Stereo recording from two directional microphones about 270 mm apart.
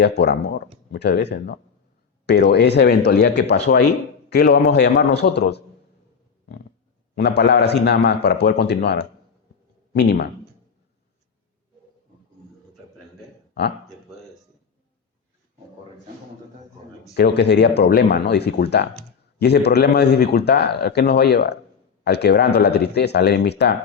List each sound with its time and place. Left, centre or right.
0.0 s speech: left
6.4 s a sound: left
7.2 s speech: left
13.5 s speech: left
17.2 s speech: left